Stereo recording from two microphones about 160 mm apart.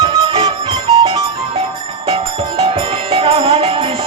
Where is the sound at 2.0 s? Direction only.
35° right (ahead or behind).